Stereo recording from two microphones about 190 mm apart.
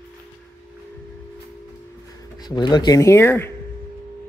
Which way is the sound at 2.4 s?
20° left (ahead or behind).